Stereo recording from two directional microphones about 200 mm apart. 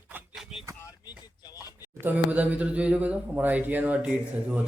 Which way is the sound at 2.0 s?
10° right (ahead or behind).